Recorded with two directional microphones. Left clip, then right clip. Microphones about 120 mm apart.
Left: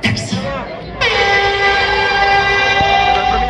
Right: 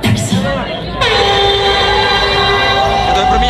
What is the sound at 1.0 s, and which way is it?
Train, 40° left (ahead or behind).